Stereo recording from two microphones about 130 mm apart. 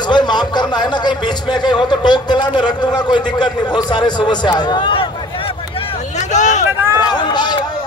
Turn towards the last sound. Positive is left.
turn(degrees=35)  # may be behind; listen again after turning